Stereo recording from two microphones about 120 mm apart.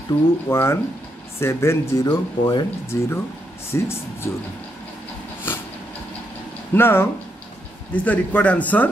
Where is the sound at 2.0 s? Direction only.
35° left (ahead or behind).